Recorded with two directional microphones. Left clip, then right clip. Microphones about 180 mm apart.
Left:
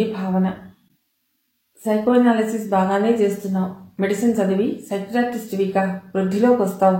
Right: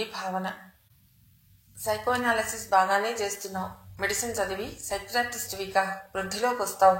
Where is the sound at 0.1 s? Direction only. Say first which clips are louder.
Left 7 dB; 35° right (ahead or behind).